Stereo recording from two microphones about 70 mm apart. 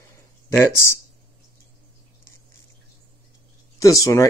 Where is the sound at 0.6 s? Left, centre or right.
Left.